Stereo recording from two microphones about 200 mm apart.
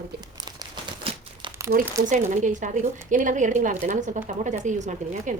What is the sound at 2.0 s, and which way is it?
A woman's voice, 40° right (ahead or behind).